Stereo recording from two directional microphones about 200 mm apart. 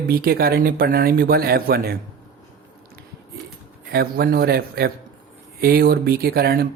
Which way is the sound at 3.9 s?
50° right (ahead or behind).